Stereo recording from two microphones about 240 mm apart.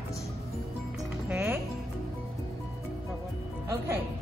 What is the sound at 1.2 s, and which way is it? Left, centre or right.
Speech, centre.